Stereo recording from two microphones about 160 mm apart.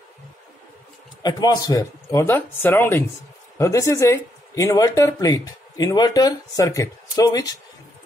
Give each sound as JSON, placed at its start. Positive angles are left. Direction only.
{"t": 1.2, "sound": "speech", "side_deg": 25}